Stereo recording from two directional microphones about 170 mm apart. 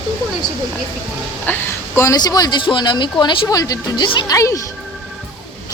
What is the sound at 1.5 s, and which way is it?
Speech, 10° left (ahead or behind).